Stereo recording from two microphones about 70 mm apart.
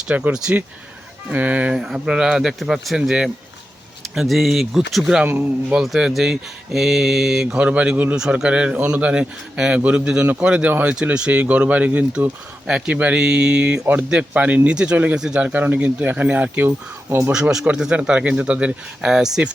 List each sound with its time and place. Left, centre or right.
0.1 s speech: centre
5.4 s speech: centre
5.8 s speech: centre; by 8.1 s right
8.1 s speech: centre
12.6 s speech: centre
16.6 s speech: right
17.5 s speech: centre